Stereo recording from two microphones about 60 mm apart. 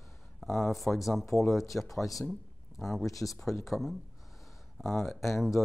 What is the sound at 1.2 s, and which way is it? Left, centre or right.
Speech, left.